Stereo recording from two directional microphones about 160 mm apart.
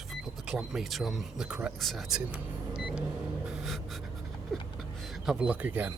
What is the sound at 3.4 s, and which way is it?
Gasp, centre (ahead or behind).